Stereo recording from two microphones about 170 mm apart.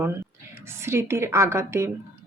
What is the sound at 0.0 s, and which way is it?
A woman's voice, 15° right (ahead or behind).